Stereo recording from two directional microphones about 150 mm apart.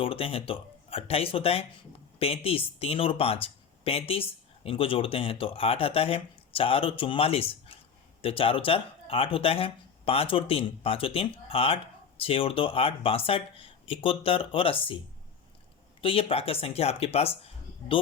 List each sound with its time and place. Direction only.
0.0 s speech: 40° left (ahead or behind)
16.0 s speech: 35° left (ahead or behind)